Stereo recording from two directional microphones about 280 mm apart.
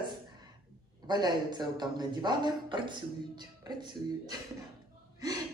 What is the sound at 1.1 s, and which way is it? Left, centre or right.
Speech, centre.